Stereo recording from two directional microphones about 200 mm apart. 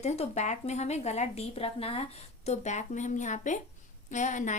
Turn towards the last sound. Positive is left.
turn(degrees=40)  # may be behind; listen again after turning